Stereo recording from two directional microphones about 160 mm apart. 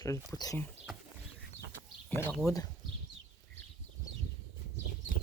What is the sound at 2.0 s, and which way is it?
Speech, 10° left (ahead or behind).